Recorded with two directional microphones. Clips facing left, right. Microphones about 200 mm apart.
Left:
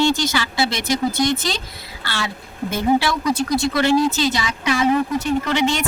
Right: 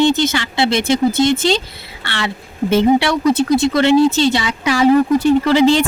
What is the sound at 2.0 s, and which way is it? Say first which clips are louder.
Speech: right 4 dB; 65° right (ahead or behind).